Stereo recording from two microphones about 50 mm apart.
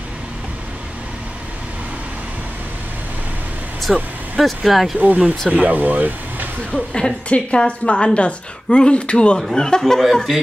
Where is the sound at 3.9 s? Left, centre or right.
Centre.